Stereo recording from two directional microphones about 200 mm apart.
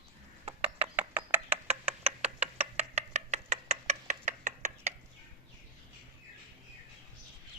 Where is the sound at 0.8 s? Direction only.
10° right (ahead or behind).